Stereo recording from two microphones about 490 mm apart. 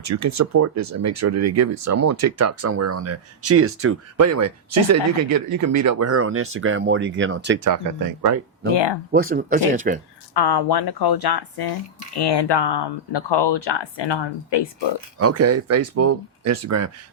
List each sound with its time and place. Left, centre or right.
0.0 s speech: right
8.7 s speech: left
9.1 s speech: centre
10.3 s speech: left
15.2 s speech: right